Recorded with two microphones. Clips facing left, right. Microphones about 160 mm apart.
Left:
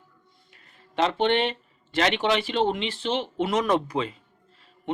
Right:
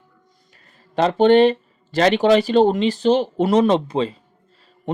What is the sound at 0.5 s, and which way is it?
Speech, 40° right (ahead or behind).